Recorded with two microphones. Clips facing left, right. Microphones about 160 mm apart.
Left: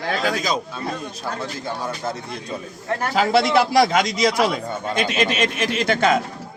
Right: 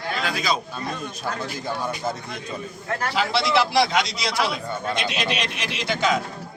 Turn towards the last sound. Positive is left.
turn(degrees=55)  # may be behind; listen again after turning